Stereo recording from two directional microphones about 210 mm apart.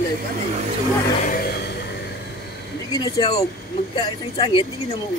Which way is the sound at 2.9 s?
20° left (ahead or behind).